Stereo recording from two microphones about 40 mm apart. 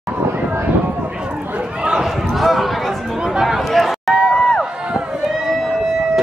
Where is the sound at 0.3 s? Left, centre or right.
Right.